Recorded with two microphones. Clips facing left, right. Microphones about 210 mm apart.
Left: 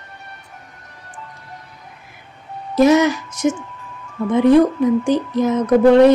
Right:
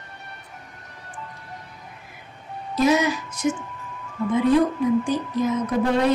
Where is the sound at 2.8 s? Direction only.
85° left.